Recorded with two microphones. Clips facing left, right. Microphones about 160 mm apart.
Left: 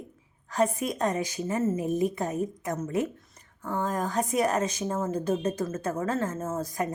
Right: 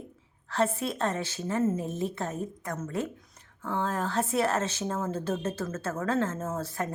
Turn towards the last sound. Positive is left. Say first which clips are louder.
# left 2 dB
turn(degrees=10)  # may be behind; listen again after turning